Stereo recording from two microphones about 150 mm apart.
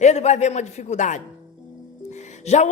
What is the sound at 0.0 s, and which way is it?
A man's voice, 50° left (ahead or behind).